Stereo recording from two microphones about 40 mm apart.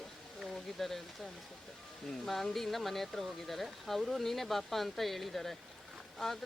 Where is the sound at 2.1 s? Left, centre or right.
Centre.